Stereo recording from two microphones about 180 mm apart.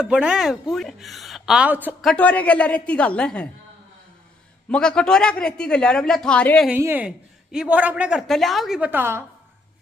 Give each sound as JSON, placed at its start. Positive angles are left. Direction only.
{"t": 0.0, "sound": "a woman's voice", "side_deg": -5}
{"t": 2.0, "sound": "a woman's voice", "side_deg": 10}
{"t": 4.6, "sound": "a woman's voice", "side_deg": 5}
{"t": 6.7, "sound": "a woman's voice", "side_deg": -10}